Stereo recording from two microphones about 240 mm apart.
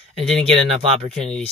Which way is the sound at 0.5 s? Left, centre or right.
Right.